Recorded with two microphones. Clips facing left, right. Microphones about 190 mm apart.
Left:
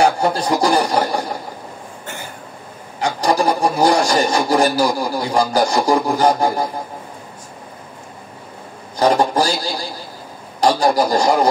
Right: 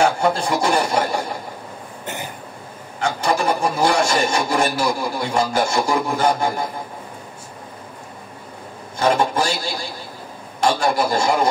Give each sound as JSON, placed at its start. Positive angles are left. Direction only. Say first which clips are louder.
{"t": 0.2, "sound": "rub", "louder": "left 2 dB", "side_deg": 35}
{"t": 3.0, "sound": "rub", "louder": "left 3 dB", "side_deg": 35}
{"t": 8.9, "sound": "rub", "louder": "left 3 dB", "side_deg": 35}